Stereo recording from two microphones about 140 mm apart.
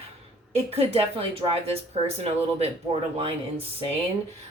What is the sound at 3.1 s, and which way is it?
Speech, 40° right (ahead or behind).